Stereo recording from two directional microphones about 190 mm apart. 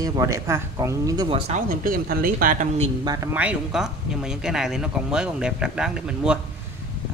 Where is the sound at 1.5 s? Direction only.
45° right (ahead or behind).